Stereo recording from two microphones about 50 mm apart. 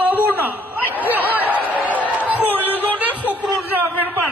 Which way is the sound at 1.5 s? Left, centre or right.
Right.